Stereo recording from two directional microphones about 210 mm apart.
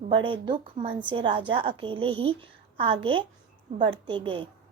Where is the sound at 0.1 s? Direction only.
25° right (ahead or behind).